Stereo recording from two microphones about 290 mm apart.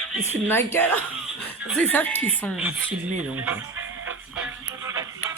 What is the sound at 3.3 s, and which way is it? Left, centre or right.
Speech, centre.